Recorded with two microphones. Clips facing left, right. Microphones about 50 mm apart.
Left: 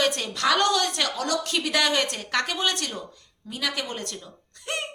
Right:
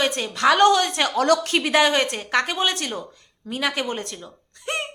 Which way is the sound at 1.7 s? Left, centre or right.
Right.